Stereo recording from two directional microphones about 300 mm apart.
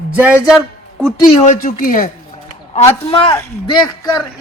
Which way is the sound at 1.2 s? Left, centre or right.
Left.